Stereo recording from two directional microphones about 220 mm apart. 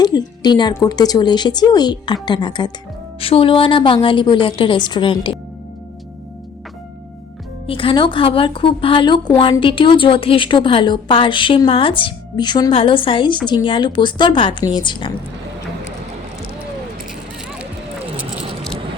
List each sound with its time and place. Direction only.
0.0 s speech: 20° left (ahead or behind)
7.7 s speech: 25° left (ahead or behind)